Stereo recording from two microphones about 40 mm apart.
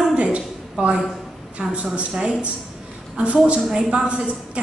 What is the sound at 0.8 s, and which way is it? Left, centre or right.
A woman's voice, right.